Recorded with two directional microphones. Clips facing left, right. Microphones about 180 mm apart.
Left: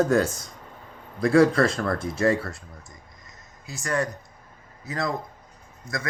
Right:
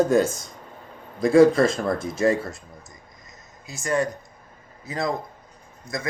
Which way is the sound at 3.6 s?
20° right (ahead or behind).